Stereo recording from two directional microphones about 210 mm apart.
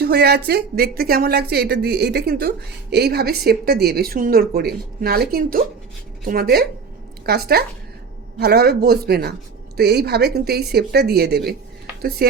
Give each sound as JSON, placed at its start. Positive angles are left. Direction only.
{"t": 0.0, "sound": "speech", "side_deg": -50}